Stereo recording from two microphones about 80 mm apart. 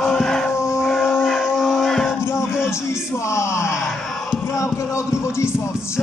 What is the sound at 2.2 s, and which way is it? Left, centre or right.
Speech, left.